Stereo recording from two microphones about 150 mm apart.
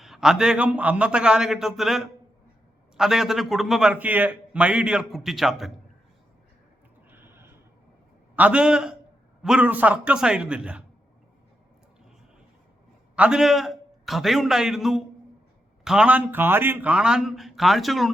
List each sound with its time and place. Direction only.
0.0 s a man's voice: 5° right (ahead or behind)
7.1 s a sound: 15° right (ahead or behind)
8.4 s a man's voice: 10° right (ahead or behind)
13.1 s a man's voice: 5° right (ahead or behind)